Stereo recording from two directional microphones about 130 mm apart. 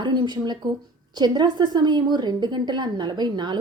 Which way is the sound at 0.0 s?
35° right (ahead or behind).